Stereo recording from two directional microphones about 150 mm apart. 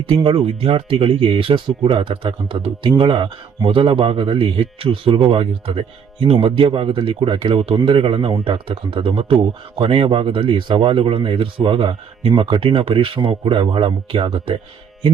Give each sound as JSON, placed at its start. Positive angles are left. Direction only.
{"t": 0.0, "sound": "speech", "side_deg": -35}